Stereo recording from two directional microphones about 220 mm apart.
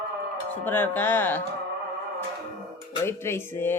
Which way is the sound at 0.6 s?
10° left (ahead or behind).